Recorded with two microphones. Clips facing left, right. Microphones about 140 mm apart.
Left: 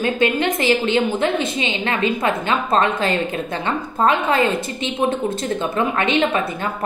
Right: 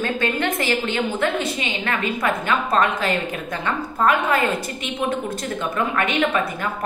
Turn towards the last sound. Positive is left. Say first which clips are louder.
# left 2 dB
turn(degrees=25)  # may be behind; listen again after turning